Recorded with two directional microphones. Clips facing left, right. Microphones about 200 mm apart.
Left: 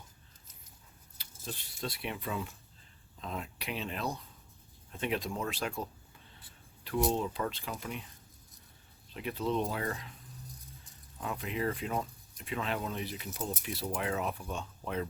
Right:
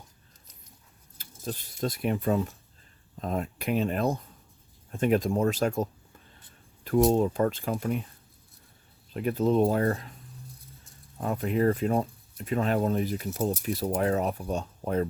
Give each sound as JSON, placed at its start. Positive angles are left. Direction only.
{"t": 1.2, "sound": "speech", "side_deg": -45}
{"t": 9.1, "sound": "speech", "side_deg": -45}
{"t": 11.2, "sound": "speech", "side_deg": -45}